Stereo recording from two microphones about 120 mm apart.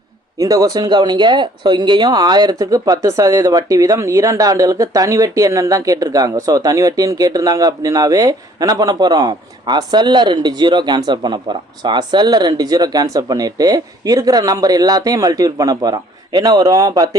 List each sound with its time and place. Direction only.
0.3 s speech: 30° right (ahead or behind)